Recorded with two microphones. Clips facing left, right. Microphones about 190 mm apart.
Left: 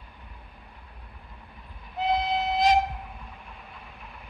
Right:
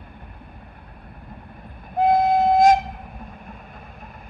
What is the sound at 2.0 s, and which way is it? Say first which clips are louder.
Train: right 9 dB; 50° right (ahead or behind).